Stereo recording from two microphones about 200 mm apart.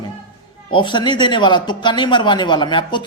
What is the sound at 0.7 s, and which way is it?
A woman's voice, 25° left (ahead or behind).